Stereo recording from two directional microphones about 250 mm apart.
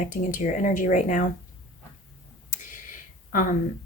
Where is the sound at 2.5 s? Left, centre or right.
Left.